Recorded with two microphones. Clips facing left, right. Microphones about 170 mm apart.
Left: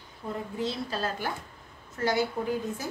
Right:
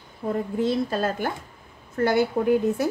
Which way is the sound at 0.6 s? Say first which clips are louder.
Right 7 dB; 50° right (ahead or behind).